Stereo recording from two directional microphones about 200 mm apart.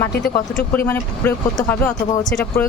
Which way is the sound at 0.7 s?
10° left (ahead or behind).